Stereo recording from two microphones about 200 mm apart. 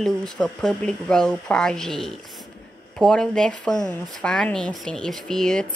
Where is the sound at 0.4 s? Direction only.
5° left (ahead or behind).